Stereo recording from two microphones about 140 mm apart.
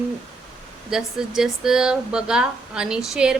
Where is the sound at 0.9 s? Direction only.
5° right (ahead or behind).